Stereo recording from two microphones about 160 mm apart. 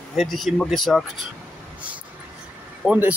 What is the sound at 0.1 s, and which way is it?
Speech, centre (ahead or behind).